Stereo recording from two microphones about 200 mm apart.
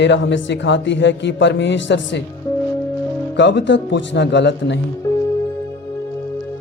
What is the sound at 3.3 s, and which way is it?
Speech, 60° left (ahead or behind).